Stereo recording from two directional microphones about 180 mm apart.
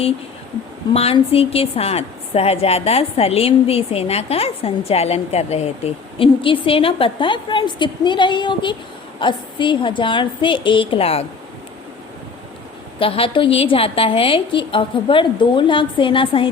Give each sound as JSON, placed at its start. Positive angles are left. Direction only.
{"t": 0.9, "sound": "a woman's voice", "side_deg": 30}
{"t": 13.0, "sound": "a woman's voice", "side_deg": 30}